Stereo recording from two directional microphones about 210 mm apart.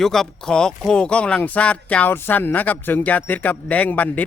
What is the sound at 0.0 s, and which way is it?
Speech, centre (ahead or behind).